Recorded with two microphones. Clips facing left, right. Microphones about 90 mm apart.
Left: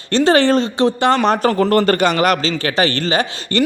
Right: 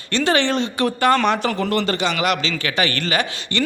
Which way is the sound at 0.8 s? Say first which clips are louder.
Left 3 dB; 25° left (ahead or behind).